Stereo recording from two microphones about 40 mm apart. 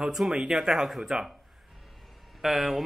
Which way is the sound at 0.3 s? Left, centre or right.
Centre.